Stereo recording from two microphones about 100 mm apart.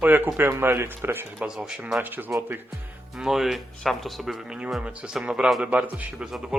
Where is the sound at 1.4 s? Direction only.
5° right (ahead or behind).